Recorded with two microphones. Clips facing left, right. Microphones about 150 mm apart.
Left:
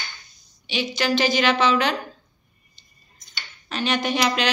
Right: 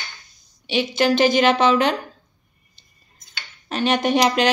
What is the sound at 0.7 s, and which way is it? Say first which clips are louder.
A woman's voice: right 5 dB; 55° right (ahead or behind).